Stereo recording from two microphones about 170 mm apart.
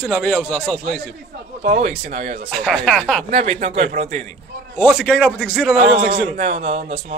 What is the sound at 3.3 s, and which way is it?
Speech, 40° right (ahead or behind).